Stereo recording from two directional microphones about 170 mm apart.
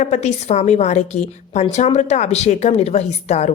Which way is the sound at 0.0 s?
40° left (ahead or behind).